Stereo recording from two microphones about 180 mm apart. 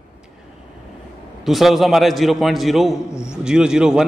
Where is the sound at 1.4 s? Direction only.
Centre (ahead or behind).